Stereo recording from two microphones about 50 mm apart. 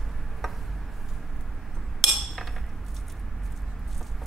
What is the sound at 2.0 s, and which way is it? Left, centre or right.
Chink, centre.